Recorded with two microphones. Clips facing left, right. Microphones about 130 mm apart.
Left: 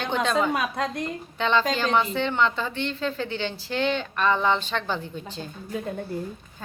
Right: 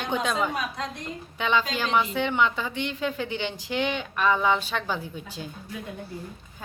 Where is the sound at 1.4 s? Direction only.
10° right (ahead or behind).